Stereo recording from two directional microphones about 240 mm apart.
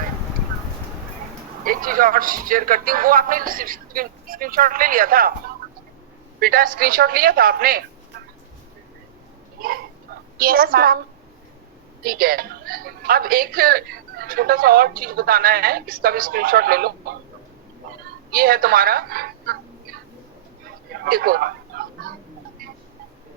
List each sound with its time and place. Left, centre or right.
1.6 s a woman's voice: right
6.4 s a woman's voice: right
10.3 s a woman's voice: right
12.0 s a woman's voice: right
18.3 s a woman's voice: right
20.9 s a sound: right